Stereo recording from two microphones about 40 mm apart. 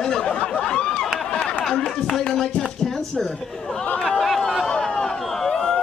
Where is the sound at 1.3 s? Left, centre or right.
Left.